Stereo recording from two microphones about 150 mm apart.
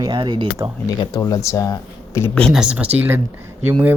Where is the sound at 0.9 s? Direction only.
30° left (ahead or behind).